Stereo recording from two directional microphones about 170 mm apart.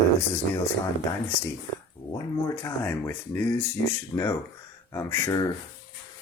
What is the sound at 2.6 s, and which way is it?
Speech, 15° left (ahead or behind).